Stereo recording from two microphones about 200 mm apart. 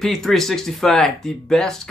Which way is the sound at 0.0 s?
Centre (ahead or behind).